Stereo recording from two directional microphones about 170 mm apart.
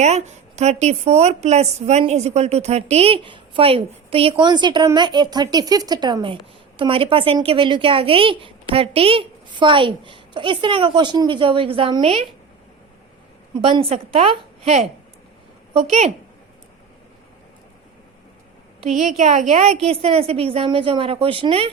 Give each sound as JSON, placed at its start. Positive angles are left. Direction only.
{"t": 0.0, "sound": "a woman's voice", "side_deg": -40}
{"t": 13.5, "sound": "a woman's voice", "side_deg": -30}
{"t": 18.8, "sound": "a woman's voice", "side_deg": -45}